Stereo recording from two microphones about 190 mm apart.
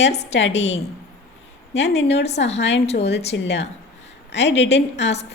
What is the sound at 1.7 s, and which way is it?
A woman's voice, 65° left (ahead or behind).